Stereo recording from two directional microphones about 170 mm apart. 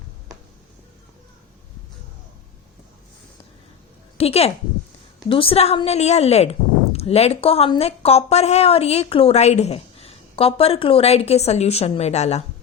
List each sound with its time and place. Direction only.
4.2 s a woman's voice: 35° left (ahead or behind)